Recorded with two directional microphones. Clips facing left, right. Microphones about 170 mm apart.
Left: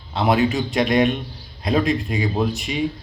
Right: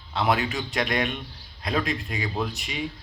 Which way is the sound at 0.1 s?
35° left (ahead or behind).